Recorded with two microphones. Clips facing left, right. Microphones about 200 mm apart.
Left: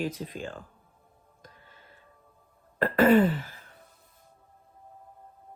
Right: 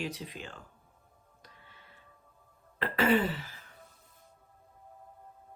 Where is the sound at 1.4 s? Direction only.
45° left (ahead or behind).